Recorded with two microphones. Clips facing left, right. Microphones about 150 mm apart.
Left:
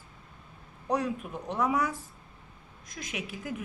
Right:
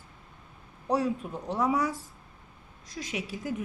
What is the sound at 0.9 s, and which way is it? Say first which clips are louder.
Speech: right 3 dB; 30° right (ahead or behind).